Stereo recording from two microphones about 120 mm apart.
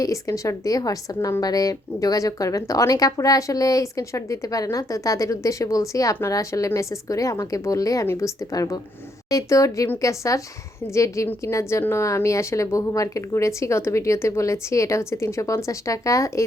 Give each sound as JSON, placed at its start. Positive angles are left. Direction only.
{"t": 0.0, "sound": "speech", "side_deg": 25}